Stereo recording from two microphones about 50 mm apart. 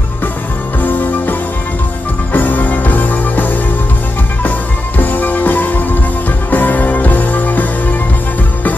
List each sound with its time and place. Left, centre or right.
0.7 s music: left
2.3 s music: left